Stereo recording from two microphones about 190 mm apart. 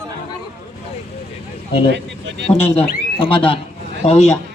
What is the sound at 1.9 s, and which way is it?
Speech, 65° right (ahead or behind).